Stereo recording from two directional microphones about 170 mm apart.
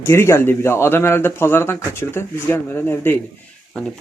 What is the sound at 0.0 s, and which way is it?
Speech, 15° left (ahead or behind).